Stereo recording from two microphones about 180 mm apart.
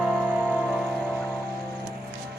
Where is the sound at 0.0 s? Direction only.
10° right (ahead or behind).